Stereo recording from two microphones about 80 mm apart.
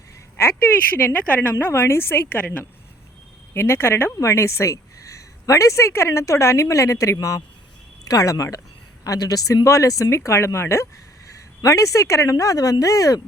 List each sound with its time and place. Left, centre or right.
0.3 s a woman's voice: left